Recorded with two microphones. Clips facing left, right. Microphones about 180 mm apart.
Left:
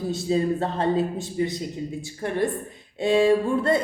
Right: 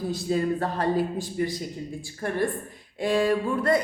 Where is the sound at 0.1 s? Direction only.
25° left (ahead or behind).